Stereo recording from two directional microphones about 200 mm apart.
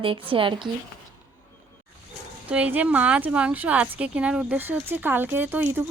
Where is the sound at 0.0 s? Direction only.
25° right (ahead or behind).